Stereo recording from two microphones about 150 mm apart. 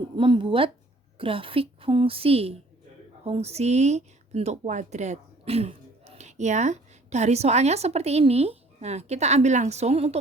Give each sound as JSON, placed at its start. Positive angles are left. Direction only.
{"t": 0.2, "sound": "a woman's voice", "side_deg": -35}